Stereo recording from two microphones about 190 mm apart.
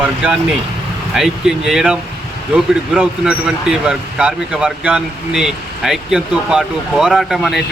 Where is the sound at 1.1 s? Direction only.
Centre (ahead or behind).